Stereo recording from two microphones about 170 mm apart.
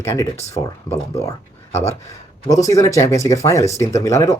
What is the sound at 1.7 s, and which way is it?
Speech, 40° left (ahead or behind).